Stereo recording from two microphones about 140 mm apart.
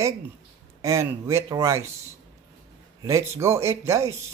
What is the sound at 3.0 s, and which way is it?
Speech, 20° right (ahead or behind).